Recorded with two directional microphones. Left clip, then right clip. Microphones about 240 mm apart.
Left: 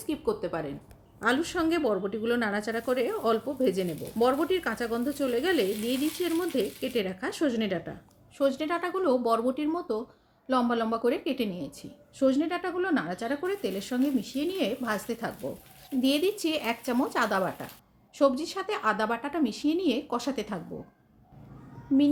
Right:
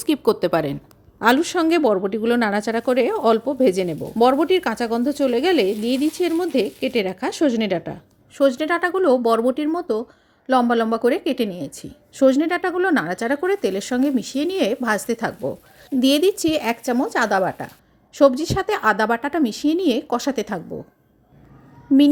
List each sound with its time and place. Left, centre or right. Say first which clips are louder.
0.0 s a woman's voice: right 11 dB; right